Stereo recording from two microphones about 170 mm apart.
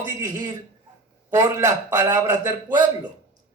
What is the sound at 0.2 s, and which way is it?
A man's voice, 20° right (ahead or behind).